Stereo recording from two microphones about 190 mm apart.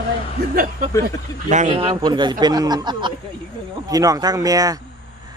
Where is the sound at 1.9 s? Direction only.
25° right (ahead or behind).